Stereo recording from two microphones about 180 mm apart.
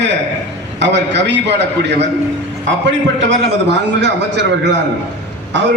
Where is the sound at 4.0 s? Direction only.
75° right (ahead or behind).